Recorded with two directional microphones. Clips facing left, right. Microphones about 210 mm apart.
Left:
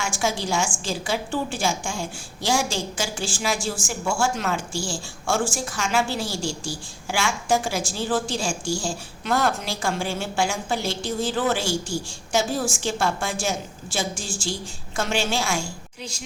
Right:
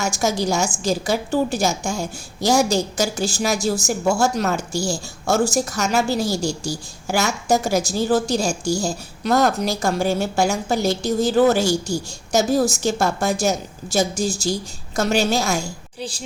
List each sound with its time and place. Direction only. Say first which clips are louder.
0.0 s a woman's voice: right 5 dB; 40° right (ahead or behind)